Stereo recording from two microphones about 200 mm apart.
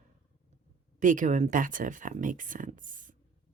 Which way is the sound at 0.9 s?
40° right (ahead or behind).